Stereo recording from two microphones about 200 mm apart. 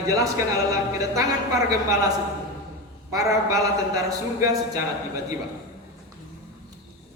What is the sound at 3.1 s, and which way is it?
A man's voice, 15° right (ahead or behind).